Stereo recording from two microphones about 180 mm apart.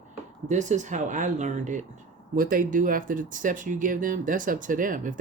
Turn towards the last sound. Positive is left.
turn(degrees=-50)  # may be behind; listen again after turning